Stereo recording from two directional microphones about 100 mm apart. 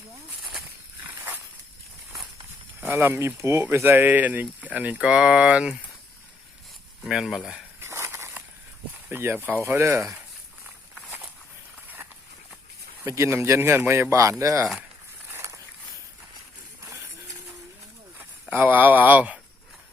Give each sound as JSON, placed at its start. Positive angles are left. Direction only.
{"t": 2.8, "sound": "speech", "side_deg": -20}
{"t": 7.1, "sound": "speech", "side_deg": 0}
{"t": 7.8, "sound": "a sound", "side_deg": -25}
{"t": 9.0, "sound": "speech", "side_deg": -20}
{"t": 13.1, "sound": "speech", "side_deg": -30}
{"t": 15.3, "sound": "a sound", "side_deg": -30}
{"t": 18.5, "sound": "speech", "side_deg": -20}